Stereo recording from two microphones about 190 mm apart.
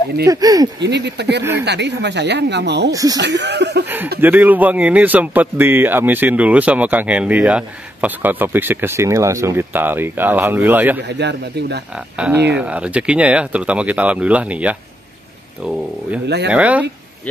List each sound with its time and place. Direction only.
0.3 s speech: 20° right (ahead or behind)
0.7 s speech: 65° right (ahead or behind)
2.9 s speech: 20° right (ahead or behind)
3.2 s speech: 65° right (ahead or behind)
4.2 s speech: 10° right (ahead or behind)
11.1 s speech: 65° right (ahead or behind)
12.2 s speech: 10° right (ahead or behind)